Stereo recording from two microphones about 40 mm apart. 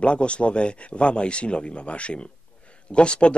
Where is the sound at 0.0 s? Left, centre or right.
Left.